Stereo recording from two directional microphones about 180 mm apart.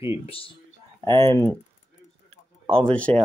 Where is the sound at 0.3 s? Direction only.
30° left (ahead or behind).